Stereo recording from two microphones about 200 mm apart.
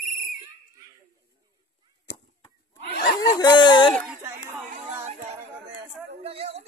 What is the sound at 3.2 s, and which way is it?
Speech, 20° left (ahead or behind).